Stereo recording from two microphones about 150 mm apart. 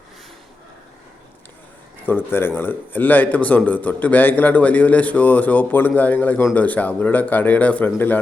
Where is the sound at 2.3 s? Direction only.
15° left (ahead or behind).